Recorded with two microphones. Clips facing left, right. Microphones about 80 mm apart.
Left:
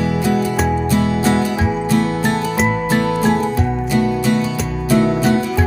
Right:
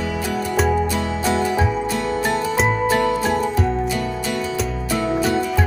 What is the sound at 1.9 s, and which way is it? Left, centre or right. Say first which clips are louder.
Music: left 5 dB; left.